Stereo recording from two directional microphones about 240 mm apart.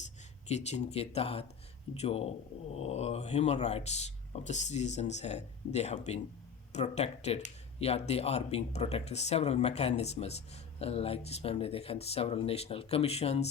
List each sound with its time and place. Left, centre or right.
0.4 s speech: left